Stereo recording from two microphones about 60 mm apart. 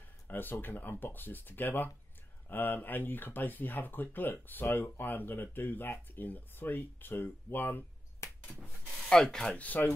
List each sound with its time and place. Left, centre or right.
0.3 s speech: left
8.2 s a sound: left
9.1 s speech: centre
9.5 s speech: left